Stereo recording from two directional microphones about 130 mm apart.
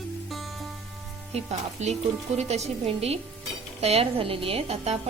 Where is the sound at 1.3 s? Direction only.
55° right (ahead or behind).